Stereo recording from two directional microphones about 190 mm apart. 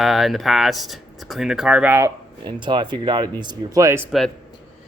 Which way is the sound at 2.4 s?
25° right (ahead or behind).